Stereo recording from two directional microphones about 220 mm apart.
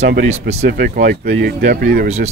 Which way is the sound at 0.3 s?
30° right (ahead or behind).